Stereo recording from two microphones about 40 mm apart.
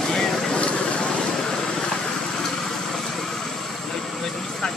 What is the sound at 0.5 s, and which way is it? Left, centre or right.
Vehicle, left.